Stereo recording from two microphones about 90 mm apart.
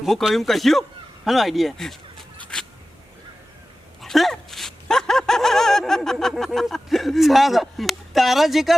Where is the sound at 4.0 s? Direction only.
Centre (ahead or behind).